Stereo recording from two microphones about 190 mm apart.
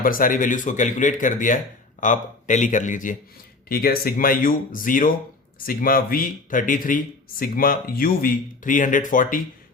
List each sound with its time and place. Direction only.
0.0 s a man's voice: 45° left (ahead or behind)